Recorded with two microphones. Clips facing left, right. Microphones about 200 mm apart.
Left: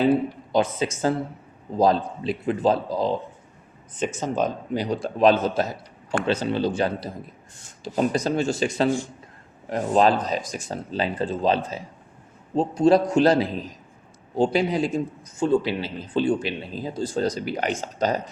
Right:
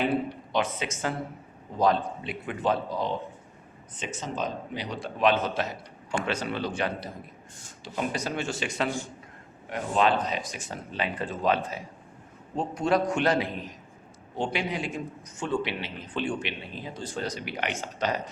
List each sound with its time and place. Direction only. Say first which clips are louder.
0.5 s a man's voice: left 6 dB; 35° left (ahead or behind)
3.9 s a man's voice: left 9 dB; 45° left (ahead or behind)